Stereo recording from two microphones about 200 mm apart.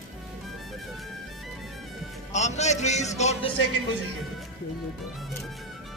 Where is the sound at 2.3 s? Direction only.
35° left (ahead or behind).